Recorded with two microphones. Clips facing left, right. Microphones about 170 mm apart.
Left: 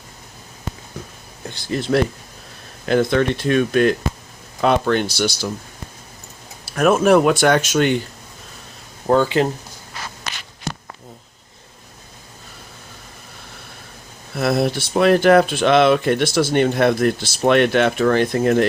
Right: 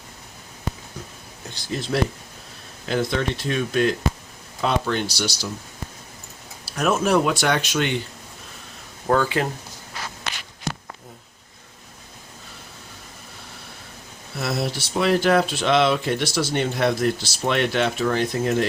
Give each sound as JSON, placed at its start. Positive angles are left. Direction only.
{"t": 1.7, "sound": "speech", "side_deg": 60}
{"t": 6.7, "sound": "speech", "side_deg": 55}
{"t": 9.0, "sound": "speech", "side_deg": 25}
{"t": 14.3, "sound": "speech", "side_deg": 55}